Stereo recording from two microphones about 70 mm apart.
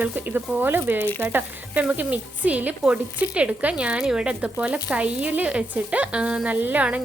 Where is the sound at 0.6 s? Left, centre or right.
Right.